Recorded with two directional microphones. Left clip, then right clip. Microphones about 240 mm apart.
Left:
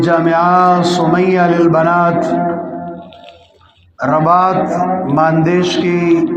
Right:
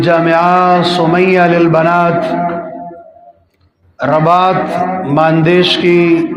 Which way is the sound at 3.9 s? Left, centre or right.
Right.